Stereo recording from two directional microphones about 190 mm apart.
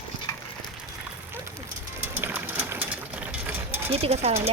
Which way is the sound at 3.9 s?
30° right (ahead or behind).